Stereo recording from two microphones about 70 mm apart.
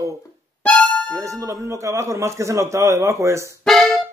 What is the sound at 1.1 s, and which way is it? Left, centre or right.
A man's voice, right.